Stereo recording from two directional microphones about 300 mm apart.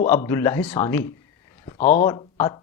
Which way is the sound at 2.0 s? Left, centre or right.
Centre.